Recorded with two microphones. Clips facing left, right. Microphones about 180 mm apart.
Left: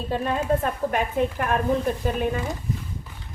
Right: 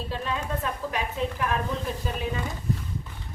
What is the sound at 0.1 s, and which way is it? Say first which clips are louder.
A woman's voice: left 10 dB; 50° left (ahead or behind).